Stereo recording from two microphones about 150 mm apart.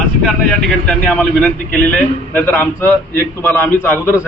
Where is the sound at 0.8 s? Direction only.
5° left (ahead or behind).